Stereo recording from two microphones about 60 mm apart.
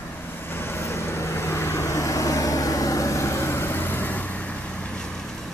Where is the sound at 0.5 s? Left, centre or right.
Left.